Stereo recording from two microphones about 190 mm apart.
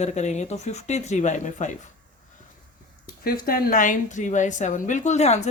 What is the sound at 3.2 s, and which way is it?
A woman's voice, 50° left (ahead or behind).